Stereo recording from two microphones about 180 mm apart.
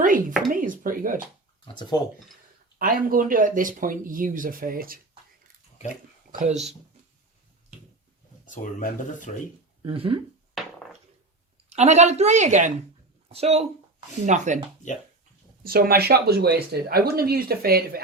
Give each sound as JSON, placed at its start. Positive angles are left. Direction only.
{"t": 0.0, "sound": "a sound", "side_deg": -45}
{"t": 1.6, "sound": "speech", "side_deg": 25}
{"t": 2.7, "sound": "speech", "side_deg": -50}
{"t": 8.4, "sound": "speech", "side_deg": 45}
{"t": 9.8, "sound": "a woman's voice", "side_deg": -30}
{"t": 11.7, "sound": "a woman's voice", "side_deg": -40}
{"t": 15.6, "sound": "speech", "side_deg": -55}